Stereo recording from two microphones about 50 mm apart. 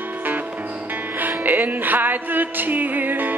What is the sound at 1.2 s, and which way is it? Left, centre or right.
Music, right.